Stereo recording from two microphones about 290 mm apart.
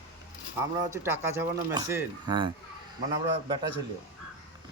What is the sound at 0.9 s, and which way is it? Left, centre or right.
Speech, centre.